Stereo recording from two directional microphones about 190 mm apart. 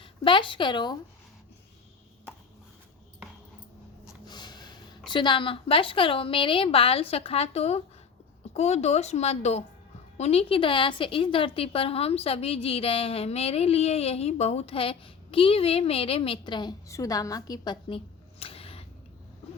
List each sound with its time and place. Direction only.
0.0 s a woman's voice: 25° left (ahead or behind)
4.3 s a woman's voice: 20° left (ahead or behind)